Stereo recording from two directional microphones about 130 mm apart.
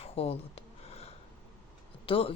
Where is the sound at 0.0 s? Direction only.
50° left (ahead or behind).